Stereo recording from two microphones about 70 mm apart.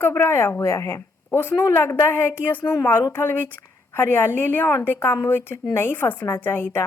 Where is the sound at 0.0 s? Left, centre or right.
Left.